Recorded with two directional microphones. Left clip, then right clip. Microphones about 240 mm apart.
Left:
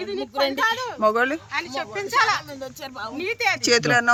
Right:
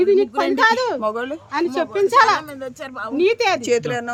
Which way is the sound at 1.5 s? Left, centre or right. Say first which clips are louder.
Right 7 dB; right.